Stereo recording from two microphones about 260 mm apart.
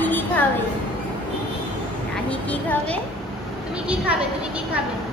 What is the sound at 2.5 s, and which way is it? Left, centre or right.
Speech, centre.